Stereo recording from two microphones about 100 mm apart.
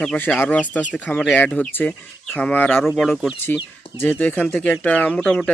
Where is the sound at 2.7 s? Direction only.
Centre (ahead or behind).